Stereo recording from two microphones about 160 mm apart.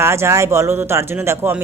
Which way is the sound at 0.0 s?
15° right (ahead or behind).